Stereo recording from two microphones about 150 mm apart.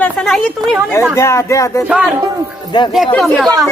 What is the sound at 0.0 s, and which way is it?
Speech, 5° left (ahead or behind).